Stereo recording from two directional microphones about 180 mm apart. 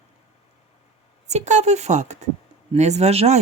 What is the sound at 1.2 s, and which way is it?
Speech, 40° right (ahead or behind).